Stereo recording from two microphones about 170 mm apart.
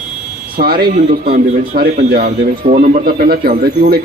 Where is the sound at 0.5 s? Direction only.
65° right (ahead or behind).